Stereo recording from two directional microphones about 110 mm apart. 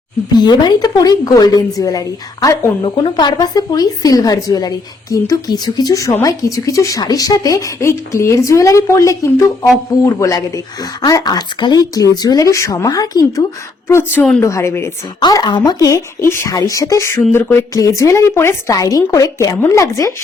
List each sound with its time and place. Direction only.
0.3 s speech: 40° left (ahead or behind)
2.8 s speech: 45° left (ahead or behind)
13.8 s speech: 20° left (ahead or behind)
15.2 s speech: 40° left (ahead or behind)